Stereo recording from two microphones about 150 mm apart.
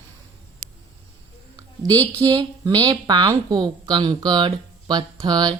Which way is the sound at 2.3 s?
25° right (ahead or behind).